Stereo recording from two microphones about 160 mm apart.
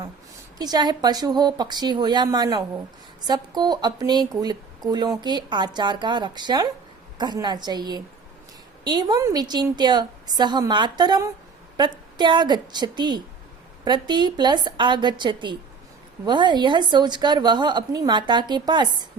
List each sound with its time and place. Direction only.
0.6 s speech: 25° right (ahead or behind)